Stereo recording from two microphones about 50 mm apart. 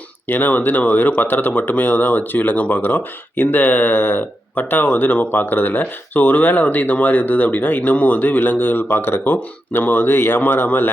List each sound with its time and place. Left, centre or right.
0.3 s speech: left
9.2 s speech: left